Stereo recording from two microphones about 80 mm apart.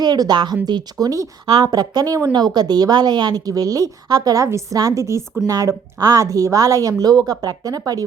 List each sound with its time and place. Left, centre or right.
0.0 s a woman's voice: right
4.4 s a woman's voice: right
5.5 s a woman's voice: right